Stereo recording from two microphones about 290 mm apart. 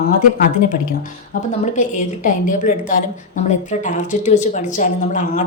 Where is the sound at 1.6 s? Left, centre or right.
Left.